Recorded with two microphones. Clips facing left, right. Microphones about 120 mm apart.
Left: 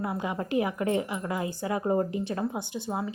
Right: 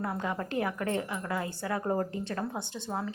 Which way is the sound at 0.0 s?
10° left (ahead or behind).